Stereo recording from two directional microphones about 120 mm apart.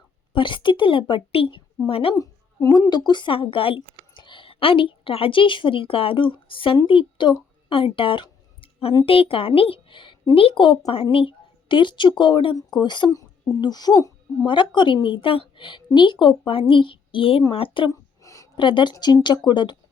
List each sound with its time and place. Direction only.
0.3 s a woman's voice: 40° left (ahead or behind)
2.1 s a woman's voice: 30° left (ahead or behind)
3.1 s a woman's voice: 40° left (ahead or behind)
7.7 s a sound: 50° left (ahead or behind)
9.0 s a woman's voice: 50° left (ahead or behind); by 14.1 s 35° left (ahead or behind)
14.4 s a woman's voice: 45° left (ahead or behind)
18.2 s a sound: 25° left (ahead or behind)
18.5 s speech: 40° left (ahead or behind)